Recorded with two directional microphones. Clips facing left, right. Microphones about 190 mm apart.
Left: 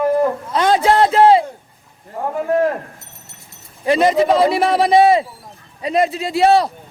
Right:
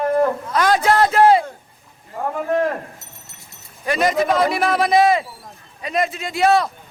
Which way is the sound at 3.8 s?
30° left (ahead or behind).